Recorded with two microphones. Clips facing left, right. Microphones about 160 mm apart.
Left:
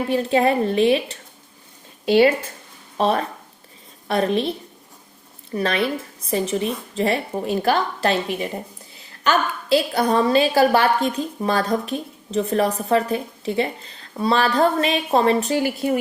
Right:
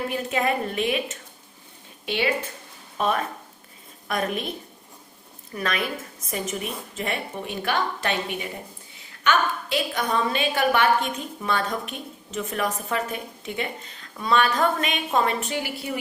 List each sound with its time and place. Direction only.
0.1 s a woman's voice: 30° left (ahead or behind)
5.5 s a woman's voice: 30° left (ahead or behind)